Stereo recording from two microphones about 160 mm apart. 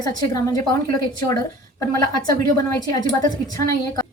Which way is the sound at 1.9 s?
25° left (ahead or behind).